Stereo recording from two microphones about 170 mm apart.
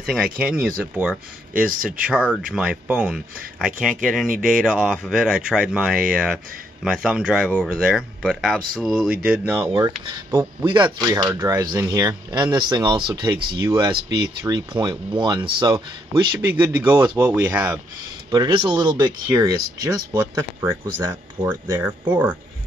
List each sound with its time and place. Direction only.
0.0 s speech: 5° right (ahead or behind)
9.7 s speech: 30° right (ahead or behind)
16.5 s speech: 10° right (ahead or behind)
16.9 s speech: 25° right (ahead or behind)
17.2 s speech: 10° right (ahead or behind)
18.3 s speech: 25° right (ahead or behind)
21.5 s speech: 10° right (ahead or behind)